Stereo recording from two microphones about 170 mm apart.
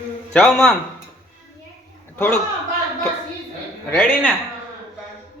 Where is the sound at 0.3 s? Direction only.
5° left (ahead or behind).